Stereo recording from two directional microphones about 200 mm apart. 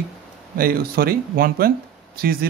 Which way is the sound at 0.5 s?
45° right (ahead or behind).